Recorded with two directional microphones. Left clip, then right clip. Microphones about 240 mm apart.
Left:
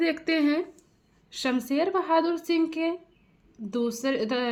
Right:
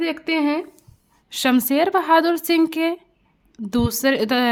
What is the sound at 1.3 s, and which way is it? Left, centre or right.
A woman's voice, right.